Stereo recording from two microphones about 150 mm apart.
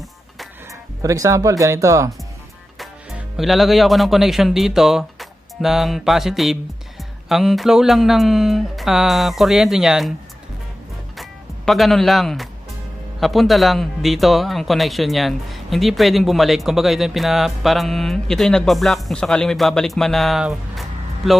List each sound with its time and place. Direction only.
1.0 s speech: 20° right (ahead or behind)
2.8 s speech: centre (ahead or behind)
11.1 s music: centre (ahead or behind)
13.2 s speech: centre (ahead or behind)